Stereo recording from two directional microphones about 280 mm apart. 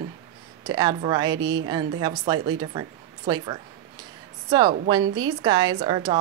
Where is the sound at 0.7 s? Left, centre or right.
Centre.